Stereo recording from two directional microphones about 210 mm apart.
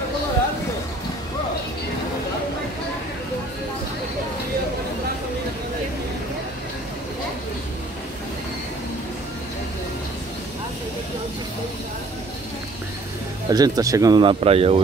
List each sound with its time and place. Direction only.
13.5 s speech: 20° right (ahead or behind)